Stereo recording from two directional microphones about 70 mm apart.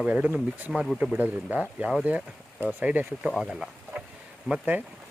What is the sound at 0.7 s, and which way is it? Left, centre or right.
Speech, centre.